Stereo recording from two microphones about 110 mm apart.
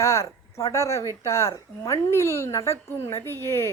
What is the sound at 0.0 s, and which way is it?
Speech, 25° left (ahead or behind).